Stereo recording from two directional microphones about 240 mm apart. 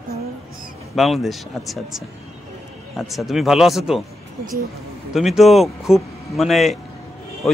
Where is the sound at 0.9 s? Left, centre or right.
Centre.